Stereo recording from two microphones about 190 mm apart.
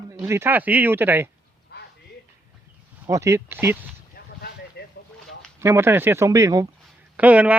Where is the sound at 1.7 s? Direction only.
55° left (ahead or behind).